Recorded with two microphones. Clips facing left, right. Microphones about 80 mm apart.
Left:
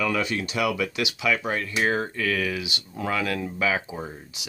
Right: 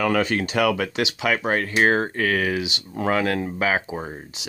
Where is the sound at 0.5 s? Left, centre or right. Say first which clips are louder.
Right 4 dB; right.